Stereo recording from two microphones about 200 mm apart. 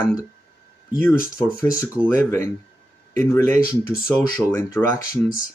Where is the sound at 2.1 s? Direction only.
10° left (ahead or behind).